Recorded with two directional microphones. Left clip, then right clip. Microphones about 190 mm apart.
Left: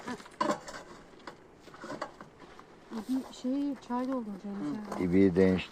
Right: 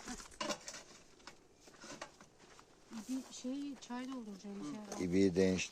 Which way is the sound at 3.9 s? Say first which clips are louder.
Left 12 dB; 50° right (ahead or behind).